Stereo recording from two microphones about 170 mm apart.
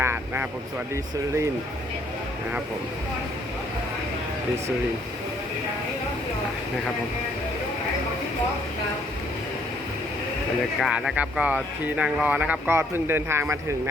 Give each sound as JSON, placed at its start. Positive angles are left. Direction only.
{"t": 0.0, "sound": "vehicle", "side_deg": -15}
{"t": 10.8, "sound": "speech", "side_deg": 0}